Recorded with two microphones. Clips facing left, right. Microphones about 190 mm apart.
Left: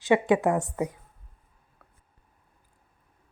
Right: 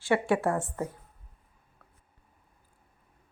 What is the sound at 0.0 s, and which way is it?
Speech, 20° left (ahead or behind).